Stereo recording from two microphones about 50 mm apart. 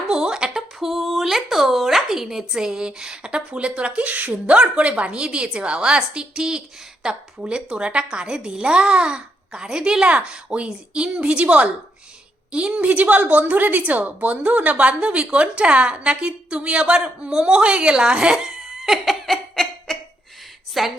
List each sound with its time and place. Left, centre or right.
0.1 s a sound: centre
0.8 s a woman's voice: centre
18.8 s giggle: centre
20.8 s a woman's voice: centre